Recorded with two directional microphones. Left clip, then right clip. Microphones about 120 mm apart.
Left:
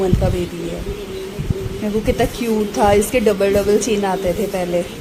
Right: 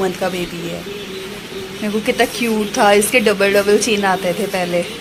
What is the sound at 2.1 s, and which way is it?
Speech, centre (ahead or behind).